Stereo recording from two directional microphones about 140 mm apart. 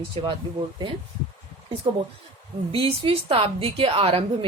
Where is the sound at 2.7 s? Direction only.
40° right (ahead or behind).